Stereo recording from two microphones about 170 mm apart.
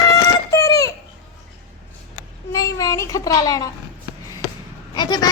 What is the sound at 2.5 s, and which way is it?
A child's voice, 20° left (ahead or behind).